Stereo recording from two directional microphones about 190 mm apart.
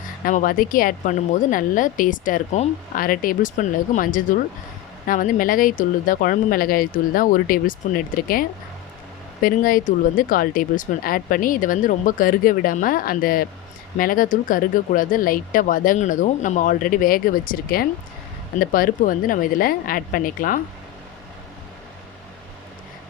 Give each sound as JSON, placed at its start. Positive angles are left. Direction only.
{"t": 0.3, "sound": "speech", "side_deg": 45}